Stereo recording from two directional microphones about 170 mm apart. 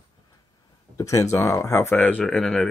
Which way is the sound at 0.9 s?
20° left (ahead or behind).